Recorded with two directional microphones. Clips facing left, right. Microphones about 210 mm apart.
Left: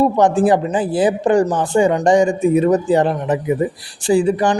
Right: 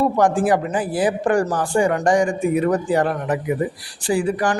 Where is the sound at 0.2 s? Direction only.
25° left (ahead or behind).